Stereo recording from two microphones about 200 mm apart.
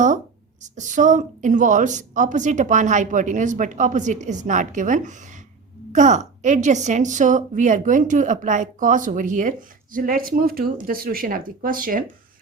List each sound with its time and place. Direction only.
0.6 s a woman's voice: 40° right (ahead or behind)